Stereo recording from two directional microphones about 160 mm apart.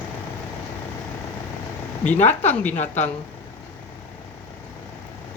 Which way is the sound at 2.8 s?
45° left (ahead or behind).